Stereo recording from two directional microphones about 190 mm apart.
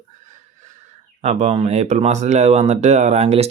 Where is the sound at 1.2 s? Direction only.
35° right (ahead or behind).